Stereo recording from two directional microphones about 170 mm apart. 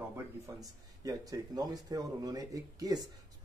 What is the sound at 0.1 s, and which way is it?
Speech, 20° right (ahead or behind).